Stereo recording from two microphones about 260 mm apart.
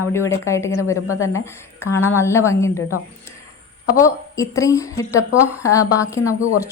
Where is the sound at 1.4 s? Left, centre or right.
Centre.